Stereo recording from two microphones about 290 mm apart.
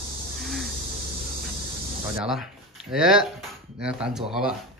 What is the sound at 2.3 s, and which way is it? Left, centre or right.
Speech, centre.